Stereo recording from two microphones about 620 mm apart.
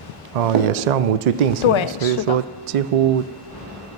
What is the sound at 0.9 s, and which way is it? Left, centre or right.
Speech, right.